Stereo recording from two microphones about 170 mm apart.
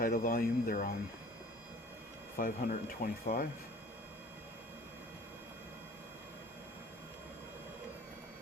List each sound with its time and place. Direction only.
0.0 s speech: 55° left (ahead or behind)
2.4 s speech: 55° left (ahead or behind)